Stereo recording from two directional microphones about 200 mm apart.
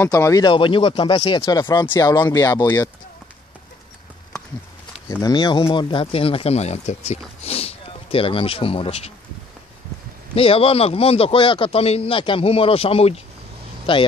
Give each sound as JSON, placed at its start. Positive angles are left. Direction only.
{"t": 0.0, "sound": "speech", "side_deg": 15}
{"t": 5.0, "sound": "speech", "side_deg": 15}
{"t": 10.3, "sound": "speech", "side_deg": 30}